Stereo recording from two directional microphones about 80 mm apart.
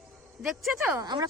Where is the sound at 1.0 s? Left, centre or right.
Right.